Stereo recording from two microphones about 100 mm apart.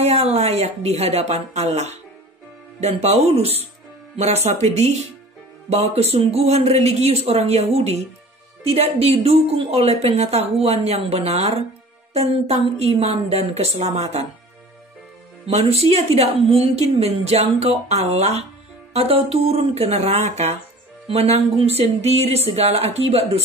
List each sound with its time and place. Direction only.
0.0 s a woman's voice: 90° right
4.7 s a woman's voice: 90° right
15.4 s a woman's voice: 80° right